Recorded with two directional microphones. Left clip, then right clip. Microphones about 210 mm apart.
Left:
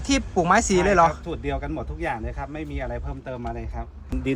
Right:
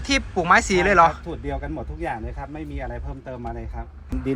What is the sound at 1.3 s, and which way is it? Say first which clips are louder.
Speech: left 1 dB; centre (ahead or behind).